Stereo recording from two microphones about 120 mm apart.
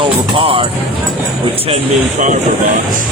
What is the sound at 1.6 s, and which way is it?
Speech, 75° right (ahead or behind).